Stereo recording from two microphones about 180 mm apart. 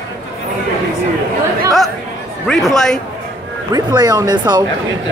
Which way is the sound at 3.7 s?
20° right (ahead or behind).